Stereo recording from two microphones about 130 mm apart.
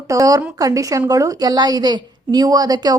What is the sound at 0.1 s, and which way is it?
A woman's voice, 25° right (ahead or behind).